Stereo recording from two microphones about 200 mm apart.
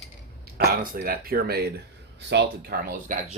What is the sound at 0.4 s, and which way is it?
Speech, 50° right (ahead or behind).